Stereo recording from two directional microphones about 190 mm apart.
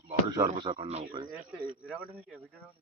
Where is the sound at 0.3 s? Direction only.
20° right (ahead or behind).